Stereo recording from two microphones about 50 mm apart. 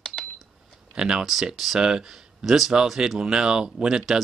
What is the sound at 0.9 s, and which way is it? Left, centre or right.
Speech, centre.